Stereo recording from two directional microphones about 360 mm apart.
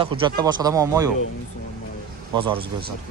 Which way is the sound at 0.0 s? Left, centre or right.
Centre.